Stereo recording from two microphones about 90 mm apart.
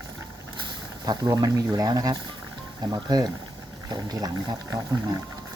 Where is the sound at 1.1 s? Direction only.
45° right (ahead or behind).